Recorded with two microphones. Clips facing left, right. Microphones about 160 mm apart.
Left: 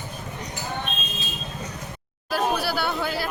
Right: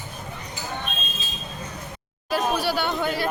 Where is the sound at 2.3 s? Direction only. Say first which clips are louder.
Right 1 dB; 5° left (ahead or behind).